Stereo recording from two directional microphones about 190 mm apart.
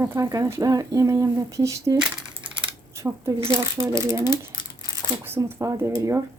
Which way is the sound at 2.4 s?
20° right (ahead or behind).